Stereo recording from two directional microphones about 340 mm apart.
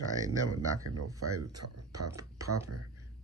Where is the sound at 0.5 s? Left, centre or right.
Right.